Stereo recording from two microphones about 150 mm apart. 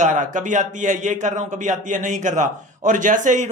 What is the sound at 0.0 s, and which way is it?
A man's voice, 55° right (ahead or behind).